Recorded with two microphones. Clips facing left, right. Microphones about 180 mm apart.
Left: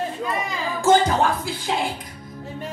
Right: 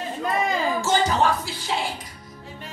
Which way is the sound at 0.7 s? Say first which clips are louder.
Left 7 dB; 55° left (ahead or behind).